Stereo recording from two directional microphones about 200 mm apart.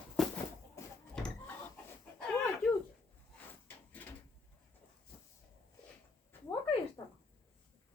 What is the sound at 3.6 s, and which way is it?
Drawer open or close, 10° left (ahead or behind).